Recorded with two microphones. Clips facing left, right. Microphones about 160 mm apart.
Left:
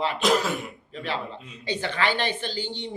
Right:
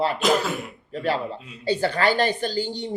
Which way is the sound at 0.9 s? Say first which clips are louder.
Right 7 dB; 40° right (ahead or behind).